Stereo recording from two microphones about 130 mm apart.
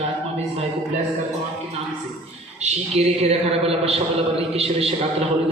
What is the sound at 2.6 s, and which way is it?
A man's voice, 55° right (ahead or behind).